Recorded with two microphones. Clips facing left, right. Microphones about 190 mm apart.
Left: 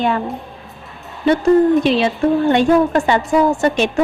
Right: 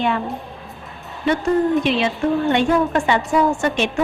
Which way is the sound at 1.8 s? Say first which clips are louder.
Left 4 dB; 35° left (ahead or behind).